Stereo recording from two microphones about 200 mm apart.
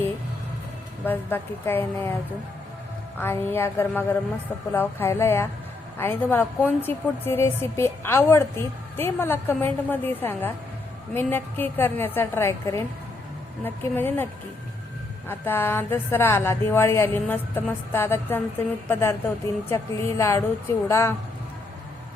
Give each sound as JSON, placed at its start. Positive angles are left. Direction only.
{"t": 1.0, "sound": "a woman's voice", "side_deg": 10}
{"t": 3.2, "sound": "a woman's voice", "side_deg": 10}
{"t": 15.3, "sound": "a woman's voice", "side_deg": 10}